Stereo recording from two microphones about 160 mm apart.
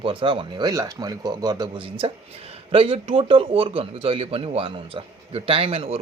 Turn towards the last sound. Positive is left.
turn(degrees=-40)  # may be behind; listen again after turning